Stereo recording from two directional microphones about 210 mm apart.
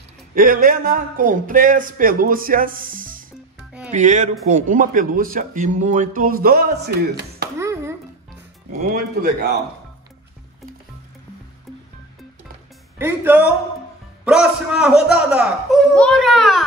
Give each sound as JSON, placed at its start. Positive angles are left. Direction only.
{"t": 0.3, "sound": "a man's voice", "side_deg": -40}
{"t": 7.5, "sound": "a sound", "side_deg": -10}
{"t": 13.0, "sound": "a man's voice", "side_deg": -10}